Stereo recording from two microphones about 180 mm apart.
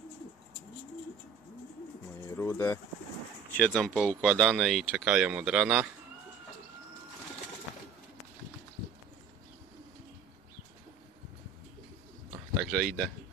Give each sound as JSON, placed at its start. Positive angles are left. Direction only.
{"t": 2.2, "sound": "bird", "side_deg": 15}
{"t": 3.5, "sound": "speech", "side_deg": 5}
{"t": 12.7, "sound": "speech", "side_deg": 0}